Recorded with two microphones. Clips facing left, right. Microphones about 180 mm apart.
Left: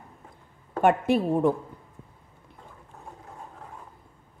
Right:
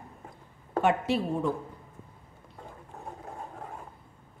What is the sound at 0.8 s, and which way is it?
Speech, 50° left (ahead or behind).